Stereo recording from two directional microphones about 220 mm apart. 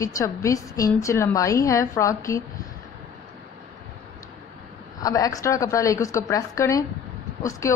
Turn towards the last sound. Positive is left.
turn(degrees=15)  # may be behind; listen again after turning